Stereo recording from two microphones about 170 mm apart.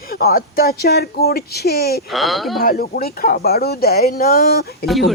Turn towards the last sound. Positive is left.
turn(degrees=0)  # may be behind; listen again after turning